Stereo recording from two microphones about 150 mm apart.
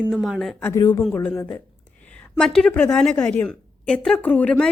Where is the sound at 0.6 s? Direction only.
25° left (ahead or behind).